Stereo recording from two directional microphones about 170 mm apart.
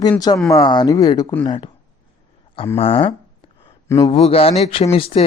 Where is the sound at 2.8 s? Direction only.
35° left (ahead or behind).